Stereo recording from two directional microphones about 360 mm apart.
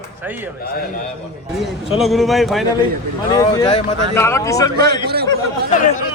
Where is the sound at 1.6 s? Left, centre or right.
Centre.